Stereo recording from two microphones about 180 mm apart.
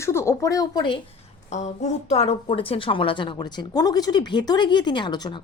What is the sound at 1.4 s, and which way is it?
Speech, 40° left (ahead or behind).